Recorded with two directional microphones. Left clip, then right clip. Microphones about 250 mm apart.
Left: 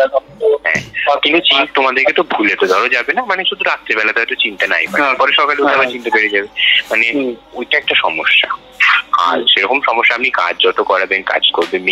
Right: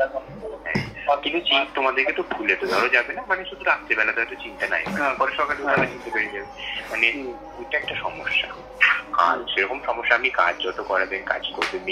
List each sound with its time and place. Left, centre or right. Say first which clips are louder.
0.7 s speech: left 9 dB; left